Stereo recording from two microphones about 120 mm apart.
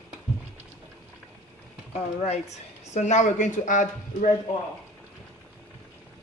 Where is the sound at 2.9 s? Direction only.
75° left (ahead or behind).